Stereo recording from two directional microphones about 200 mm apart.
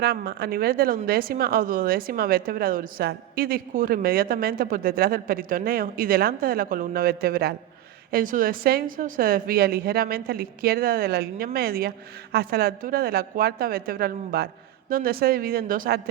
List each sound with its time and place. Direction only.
0.0 s a woman's voice: 50° right (ahead or behind)